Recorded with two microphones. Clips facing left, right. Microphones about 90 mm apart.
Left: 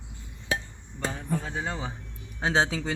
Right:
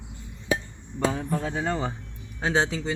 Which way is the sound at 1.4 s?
90° right.